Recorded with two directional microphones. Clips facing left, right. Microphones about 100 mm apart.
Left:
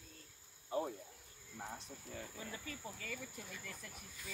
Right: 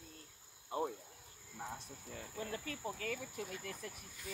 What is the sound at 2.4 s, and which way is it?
Speech, 65° right (ahead or behind).